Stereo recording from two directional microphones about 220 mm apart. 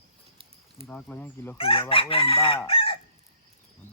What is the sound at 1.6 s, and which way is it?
Chicken, 25° left (ahead or behind).